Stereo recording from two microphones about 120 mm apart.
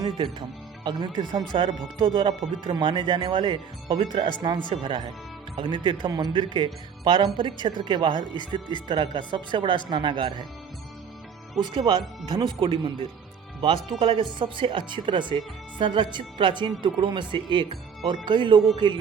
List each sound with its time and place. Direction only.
0.9 s speech: 40° right (ahead or behind)
11.6 s speech: 40° right (ahead or behind)